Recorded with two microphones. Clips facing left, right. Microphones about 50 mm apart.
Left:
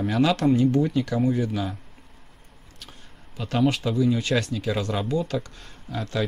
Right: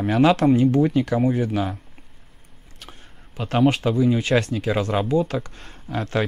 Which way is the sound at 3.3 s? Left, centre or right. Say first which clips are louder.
Right 4 dB; right.